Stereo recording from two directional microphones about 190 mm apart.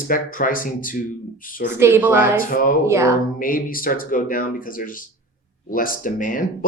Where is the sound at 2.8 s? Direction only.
15° right (ahead or behind).